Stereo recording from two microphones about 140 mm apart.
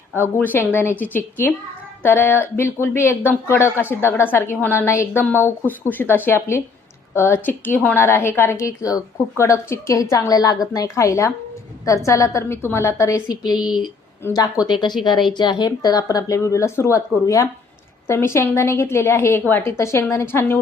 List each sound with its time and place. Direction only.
0.2 s a woman's voice: 15° left (ahead or behind)
13.5 s speech: 5° right (ahead or behind)
14.3 s a woman's voice: 25° left (ahead or behind)